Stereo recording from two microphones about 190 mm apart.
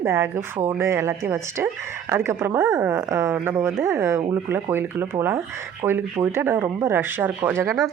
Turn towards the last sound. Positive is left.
turn(degrees=-15)  # may be behind; listen again after turning